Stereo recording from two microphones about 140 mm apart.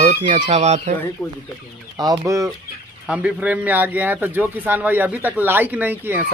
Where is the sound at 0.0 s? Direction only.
30° right (ahead or behind).